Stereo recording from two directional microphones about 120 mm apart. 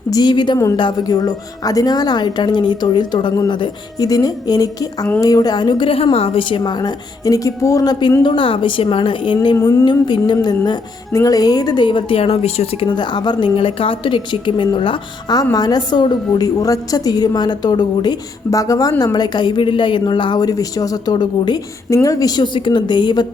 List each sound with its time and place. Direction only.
0.1 s a woman's voice: 35° left (ahead or behind)
6.6 s a woman's voice: 35° left (ahead or behind)